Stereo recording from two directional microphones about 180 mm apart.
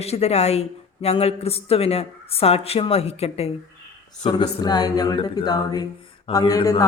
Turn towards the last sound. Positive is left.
turn(degrees=20)  # may be behind; listen again after turning